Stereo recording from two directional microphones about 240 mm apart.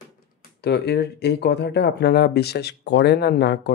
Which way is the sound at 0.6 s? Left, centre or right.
Left.